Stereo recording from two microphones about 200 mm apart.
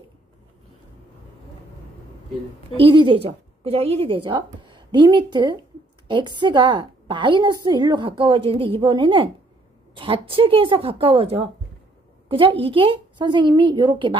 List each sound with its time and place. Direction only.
2.8 s a woman's voice: 25° right (ahead or behind)